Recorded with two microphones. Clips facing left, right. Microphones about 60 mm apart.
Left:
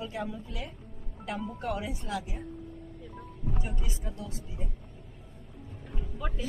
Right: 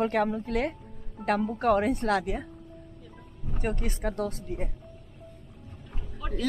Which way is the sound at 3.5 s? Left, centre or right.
Right.